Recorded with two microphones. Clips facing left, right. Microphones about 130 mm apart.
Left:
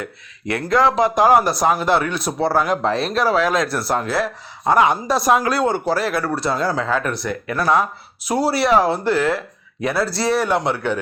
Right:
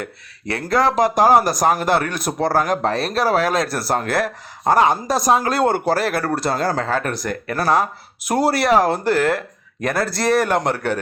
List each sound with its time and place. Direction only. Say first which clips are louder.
0.4 s a man's voice: left 1 dB; 35° right (ahead or behind)
5.5 s a man's voice: right 1 dB; 55° right (ahead or behind); by 7.9 s 40° right (ahead or behind)
8.3 s speech: even; 50° right (ahead or behind)